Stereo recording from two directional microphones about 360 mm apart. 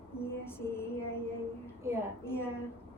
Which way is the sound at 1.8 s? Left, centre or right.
Centre.